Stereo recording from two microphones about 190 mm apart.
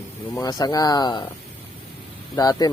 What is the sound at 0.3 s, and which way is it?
Speech, 20° left (ahead or behind).